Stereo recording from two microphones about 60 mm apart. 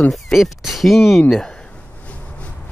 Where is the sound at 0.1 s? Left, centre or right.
Centre.